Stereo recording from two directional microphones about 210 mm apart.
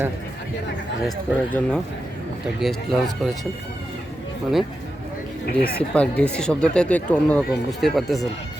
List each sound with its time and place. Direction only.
1.0 s speech: 5° left (ahead or behind)
5.5 s speech: 45° left (ahead or behind)
5.9 s speech: 5° left (ahead or behind)